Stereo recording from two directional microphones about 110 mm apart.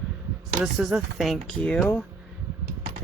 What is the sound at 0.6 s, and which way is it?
Speech, 5° right (ahead or behind).